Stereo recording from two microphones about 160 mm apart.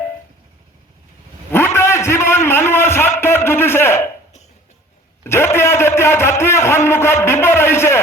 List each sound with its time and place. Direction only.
1.5 s a sound: 15° left (ahead or behind)
3.2 s a man's voice: 15° left (ahead or behind)
5.2 s a man's voice: 15° left (ahead or behind)